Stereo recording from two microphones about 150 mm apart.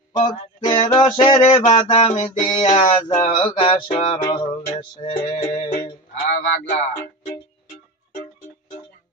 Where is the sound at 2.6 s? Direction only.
50° left (ahead or behind).